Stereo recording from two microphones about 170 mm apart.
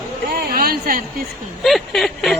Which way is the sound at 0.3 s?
60° right (ahead or behind).